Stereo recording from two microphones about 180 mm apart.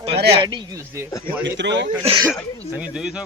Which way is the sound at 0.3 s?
25° right (ahead or behind).